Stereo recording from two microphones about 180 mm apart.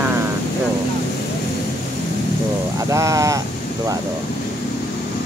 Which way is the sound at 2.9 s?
15° right (ahead or behind).